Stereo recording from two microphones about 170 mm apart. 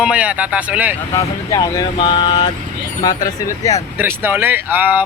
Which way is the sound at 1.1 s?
20° left (ahead or behind).